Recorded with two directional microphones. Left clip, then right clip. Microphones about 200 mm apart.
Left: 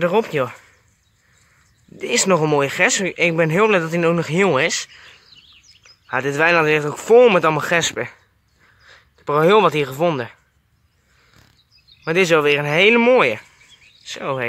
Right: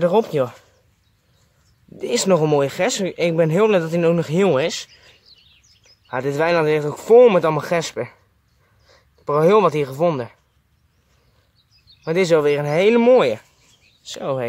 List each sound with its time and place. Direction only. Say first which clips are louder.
0.0 s speech: right 1 dB; 5° right (ahead or behind)
2.0 s speech: even; 5° right (ahead or behind)
5.5 s a sound: left 5 dB; 45° left (ahead or behind)
6.0 s speech: left 3 dB; centre (ahead or behind)
12.0 s speech: left 1 dB; centre (ahead or behind)